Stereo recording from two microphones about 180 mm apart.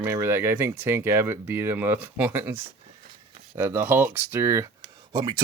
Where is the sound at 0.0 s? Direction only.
15° right (ahead or behind).